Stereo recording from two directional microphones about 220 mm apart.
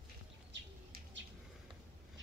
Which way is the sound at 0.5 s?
55° right (ahead or behind).